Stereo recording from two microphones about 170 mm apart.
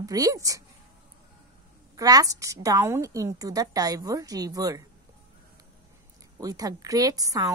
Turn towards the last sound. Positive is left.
turn(degrees=-20)  # may be behind; listen again after turning